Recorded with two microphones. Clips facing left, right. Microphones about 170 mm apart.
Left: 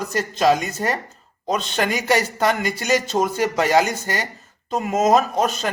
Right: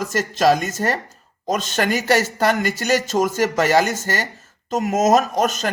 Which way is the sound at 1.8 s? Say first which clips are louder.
Right 2 dB; 55° right (ahead or behind).